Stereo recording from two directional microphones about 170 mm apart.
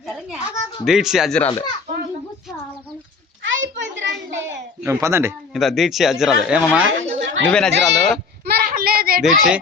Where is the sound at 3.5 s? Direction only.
90° right.